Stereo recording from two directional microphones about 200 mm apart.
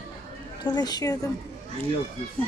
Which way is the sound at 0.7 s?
20° left (ahead or behind).